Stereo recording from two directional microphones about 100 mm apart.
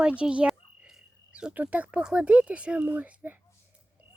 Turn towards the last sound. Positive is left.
turn(degrees=-15)  # may be behind; listen again after turning